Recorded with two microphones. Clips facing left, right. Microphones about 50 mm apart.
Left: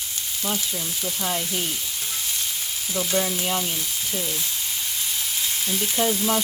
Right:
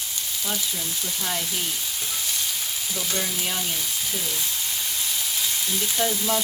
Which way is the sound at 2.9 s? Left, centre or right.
Left.